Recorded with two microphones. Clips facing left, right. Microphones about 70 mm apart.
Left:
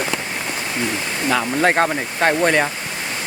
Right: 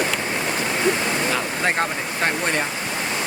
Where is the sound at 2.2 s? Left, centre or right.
Left.